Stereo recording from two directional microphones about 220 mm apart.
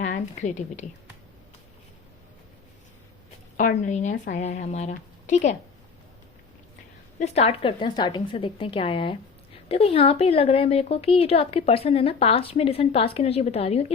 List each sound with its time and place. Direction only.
0.0 s a woman's voice: 35° left (ahead or behind)
3.6 s a woman's voice: 35° left (ahead or behind)
7.2 s speech: 30° left (ahead or behind)